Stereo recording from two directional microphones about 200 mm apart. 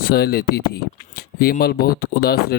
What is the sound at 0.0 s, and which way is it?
Speech, 50° left (ahead or behind).